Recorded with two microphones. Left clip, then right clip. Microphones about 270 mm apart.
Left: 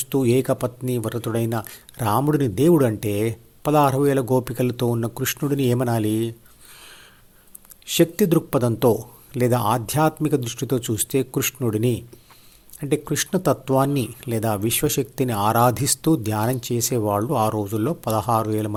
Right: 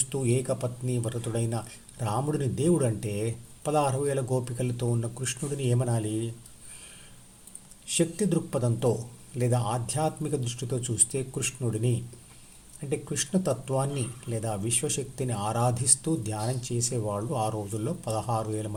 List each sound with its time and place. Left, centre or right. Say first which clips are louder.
0.0 s speech: left 9 dB; left
7.9 s speech: left 9 dB; left